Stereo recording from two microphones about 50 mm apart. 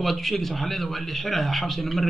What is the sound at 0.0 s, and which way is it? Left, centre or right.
A man's voice, centre.